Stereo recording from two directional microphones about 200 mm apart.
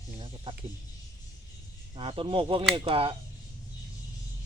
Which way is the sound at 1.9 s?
25° right (ahead or behind).